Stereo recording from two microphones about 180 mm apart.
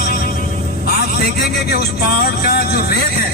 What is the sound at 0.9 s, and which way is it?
Vehicle, 55° left (ahead or behind).